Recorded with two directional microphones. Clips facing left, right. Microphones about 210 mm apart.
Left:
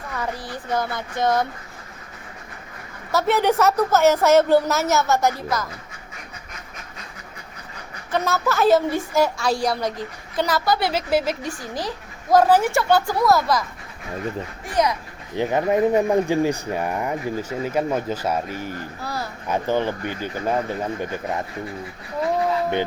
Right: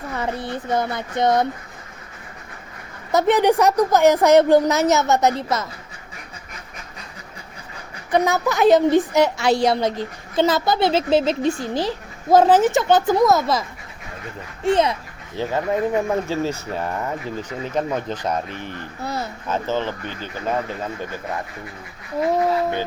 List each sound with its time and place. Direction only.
0.2 s a woman's voice: 25° right (ahead or behind)
3.1 s a woman's voice: 20° right (ahead or behind)
8.1 s a woman's voice: 15° right (ahead or behind)
15.4 s speech: 15° left (ahead or behind)
19.0 s a woman's voice: 20° right (ahead or behind)
19.5 s speech: 15° left (ahead or behind)